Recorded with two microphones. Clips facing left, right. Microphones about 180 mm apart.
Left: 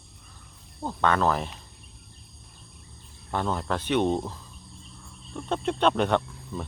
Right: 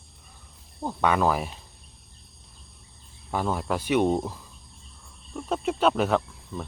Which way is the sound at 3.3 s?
5° right (ahead or behind).